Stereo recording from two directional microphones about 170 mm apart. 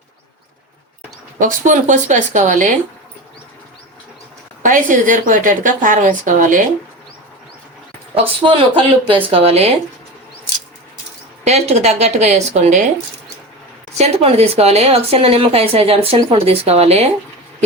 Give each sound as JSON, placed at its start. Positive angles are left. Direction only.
{"t": 1.4, "sound": "a woman's voice", "side_deg": -45}
{"t": 4.6, "sound": "a woman's voice", "side_deg": -50}
{"t": 8.1, "sound": "a woman's voice", "side_deg": -35}
{"t": 11.4, "sound": "a woman's voice", "side_deg": -40}
{"t": 14.0, "sound": "a woman's voice", "side_deg": -40}